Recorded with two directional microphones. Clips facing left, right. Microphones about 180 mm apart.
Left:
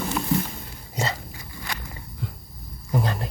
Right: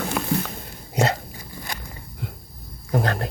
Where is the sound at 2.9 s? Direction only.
65° right (ahead or behind).